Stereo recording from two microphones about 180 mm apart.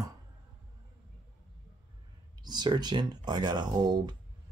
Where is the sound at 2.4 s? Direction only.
25° right (ahead or behind).